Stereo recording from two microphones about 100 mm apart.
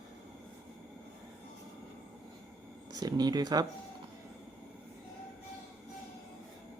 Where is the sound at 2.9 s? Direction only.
40° right (ahead or behind).